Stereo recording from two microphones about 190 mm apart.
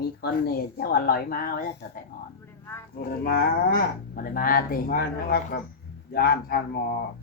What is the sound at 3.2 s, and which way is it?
Speech, 50° left (ahead or behind).